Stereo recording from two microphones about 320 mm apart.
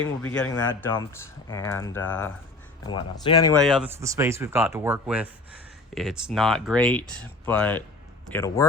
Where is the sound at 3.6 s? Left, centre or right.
Centre.